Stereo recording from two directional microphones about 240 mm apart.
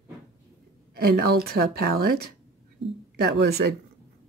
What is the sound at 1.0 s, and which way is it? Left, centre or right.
A woman's voice, right.